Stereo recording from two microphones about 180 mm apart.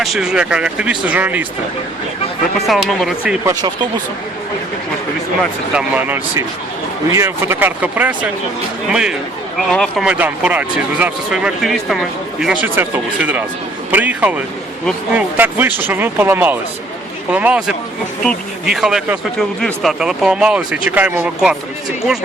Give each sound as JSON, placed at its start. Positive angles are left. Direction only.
{"t": 0.0, "sound": "speech", "side_deg": 0}
{"t": 2.6, "sound": "speech", "side_deg": 0}
{"t": 3.4, "sound": "speech", "side_deg": -25}
{"t": 5.7, "sound": "speech", "side_deg": -10}
{"t": 10.1, "sound": "speech", "side_deg": -10}